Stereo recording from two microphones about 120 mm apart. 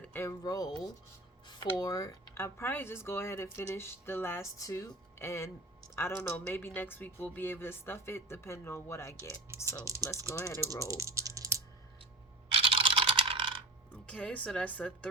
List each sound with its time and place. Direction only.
0.0 s speech: 20° left (ahead or behind)
1.8 s speech: 35° left (ahead or behind)
9.9 s speech: 30° right (ahead or behind)
10.3 s speech: 25° left (ahead or behind)
10.8 s typing: 25° right (ahead or behind)
12.5 s computer keyboard: 50° right (ahead or behind)
13.9 s speech: 10° left (ahead or behind)